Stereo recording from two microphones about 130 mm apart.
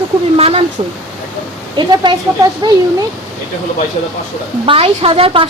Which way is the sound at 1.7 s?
35° right (ahead or behind).